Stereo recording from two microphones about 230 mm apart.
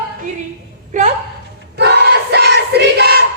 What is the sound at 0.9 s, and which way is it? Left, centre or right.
Speech, right.